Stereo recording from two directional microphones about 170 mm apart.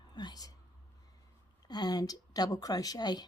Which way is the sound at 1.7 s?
25° left (ahead or behind).